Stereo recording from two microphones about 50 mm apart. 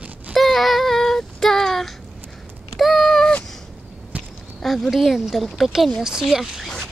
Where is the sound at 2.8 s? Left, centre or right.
Centre.